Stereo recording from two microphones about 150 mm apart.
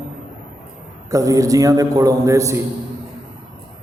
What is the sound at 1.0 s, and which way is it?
A man's voice, 20° right (ahead or behind).